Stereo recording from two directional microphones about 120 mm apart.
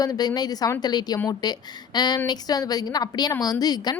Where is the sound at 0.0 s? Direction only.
35° left (ahead or behind).